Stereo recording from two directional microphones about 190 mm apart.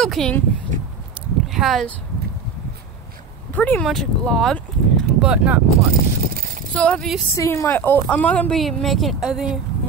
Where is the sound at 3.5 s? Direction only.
10° left (ahead or behind).